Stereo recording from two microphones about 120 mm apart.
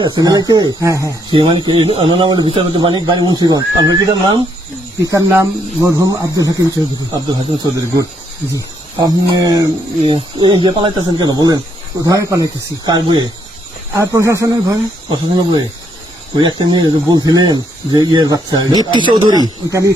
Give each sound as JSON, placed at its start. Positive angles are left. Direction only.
{"t": 0.1, "sound": "speech", "side_deg": -35}
{"t": 1.3, "sound": "speech", "side_deg": -40}
{"t": 13.9, "sound": "speech", "side_deg": -25}